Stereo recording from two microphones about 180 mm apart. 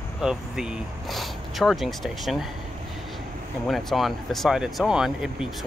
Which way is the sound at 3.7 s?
Centre (ahead or behind).